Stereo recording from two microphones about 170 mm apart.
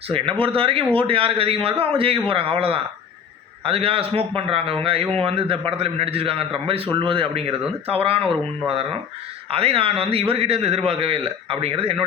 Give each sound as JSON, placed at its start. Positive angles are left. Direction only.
{"t": 0.1, "sound": "a man's voice", "side_deg": -30}